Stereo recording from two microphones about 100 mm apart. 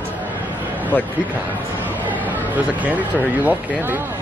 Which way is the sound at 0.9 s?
15° left (ahead or behind).